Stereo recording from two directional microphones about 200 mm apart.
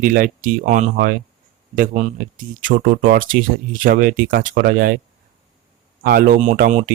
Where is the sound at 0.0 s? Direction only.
45° right (ahead or behind).